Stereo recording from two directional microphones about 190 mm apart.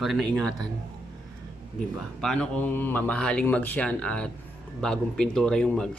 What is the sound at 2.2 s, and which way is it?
Speech, 5° left (ahead or behind).